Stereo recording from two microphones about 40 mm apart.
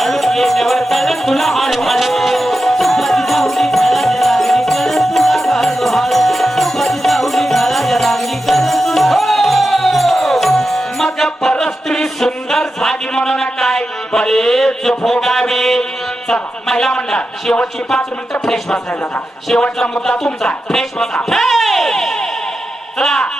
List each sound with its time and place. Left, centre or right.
0.0 s music: centre
16.3 s speech: centre
16.9 s a man's voice: left
18.4 s speech: centre
19.5 s a man's voice: centre
21.2 s a sound: centre